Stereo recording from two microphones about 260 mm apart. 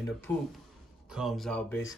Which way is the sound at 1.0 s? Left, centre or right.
Centre.